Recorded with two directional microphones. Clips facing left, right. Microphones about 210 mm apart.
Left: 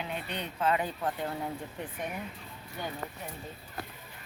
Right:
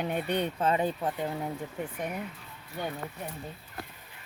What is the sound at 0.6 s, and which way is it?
Speech, 30° right (ahead or behind).